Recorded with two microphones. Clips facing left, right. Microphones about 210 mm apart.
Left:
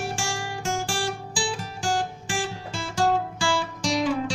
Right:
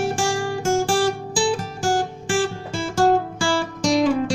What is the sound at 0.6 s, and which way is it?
Guitar, 45° right (ahead or behind).